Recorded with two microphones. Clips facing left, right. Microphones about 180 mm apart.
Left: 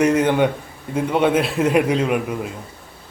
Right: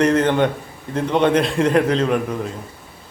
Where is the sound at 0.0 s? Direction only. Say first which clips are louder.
Even; 10° left (ahead or behind).